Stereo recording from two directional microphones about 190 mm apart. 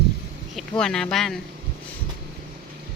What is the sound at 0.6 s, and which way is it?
Speech, 5° left (ahead or behind).